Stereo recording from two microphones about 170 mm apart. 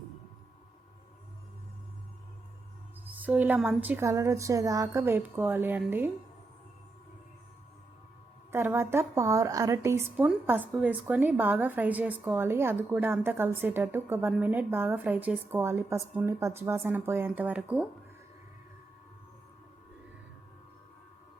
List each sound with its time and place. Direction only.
3.2 s a woman's voice: 10° right (ahead or behind)
8.5 s a woman's voice: 15° right (ahead or behind)